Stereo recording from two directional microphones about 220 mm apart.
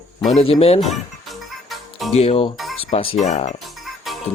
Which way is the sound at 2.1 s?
30° left (ahead or behind).